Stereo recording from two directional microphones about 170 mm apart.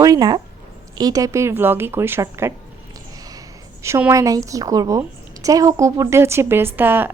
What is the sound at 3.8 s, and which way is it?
Speech, 15° right (ahead or behind).